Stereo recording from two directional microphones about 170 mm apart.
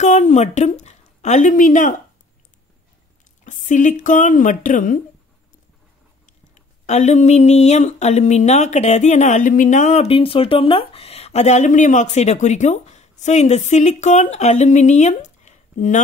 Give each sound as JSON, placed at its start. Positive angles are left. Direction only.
{"t": 0.0, "sound": "a woman's voice", "side_deg": 45}
{"t": 3.4, "sound": "speech", "side_deg": 45}
{"t": 6.5, "sound": "speech", "side_deg": 40}